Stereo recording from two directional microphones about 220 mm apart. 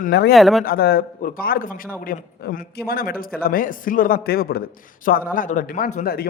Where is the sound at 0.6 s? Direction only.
45° left (ahead or behind).